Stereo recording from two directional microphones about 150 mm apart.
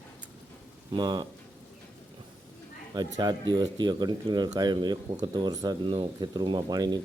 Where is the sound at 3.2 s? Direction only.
30° right (ahead or behind).